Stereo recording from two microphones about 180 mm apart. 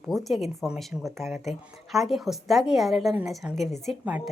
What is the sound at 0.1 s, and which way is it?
Speech, centre (ahead or behind).